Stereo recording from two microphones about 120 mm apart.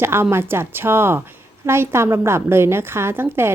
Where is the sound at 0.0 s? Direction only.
20° right (ahead or behind).